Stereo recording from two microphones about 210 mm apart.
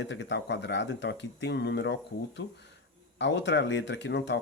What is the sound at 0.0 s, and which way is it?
Speech, 60° left (ahead or behind).